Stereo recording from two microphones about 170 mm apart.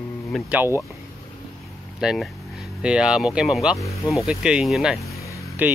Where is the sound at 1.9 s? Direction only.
Centre (ahead or behind).